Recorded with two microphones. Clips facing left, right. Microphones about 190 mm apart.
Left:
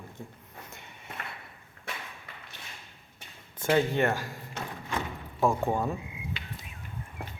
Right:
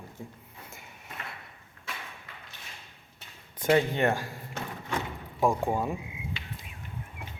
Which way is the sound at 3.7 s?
20° right (ahead or behind).